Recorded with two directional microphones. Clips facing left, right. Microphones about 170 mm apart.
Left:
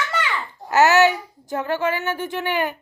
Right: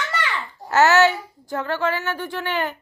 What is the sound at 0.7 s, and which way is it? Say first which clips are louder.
Speech: left 1 dB; 15° left (ahead or behind).